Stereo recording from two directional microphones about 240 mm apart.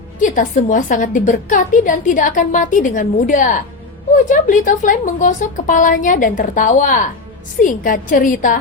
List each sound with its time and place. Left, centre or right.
0.2 s a woman's voice: left